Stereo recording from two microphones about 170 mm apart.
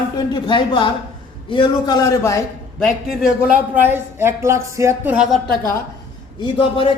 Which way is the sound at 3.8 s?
15° right (ahead or behind).